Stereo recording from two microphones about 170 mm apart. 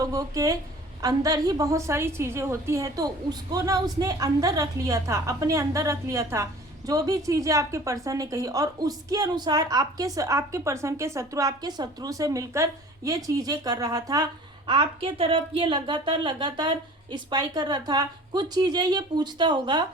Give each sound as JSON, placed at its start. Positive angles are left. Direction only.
{"t": 0.0, "sound": "a woman's voice", "side_deg": -20}
{"t": 14.7, "sound": "a woman's voice", "side_deg": -30}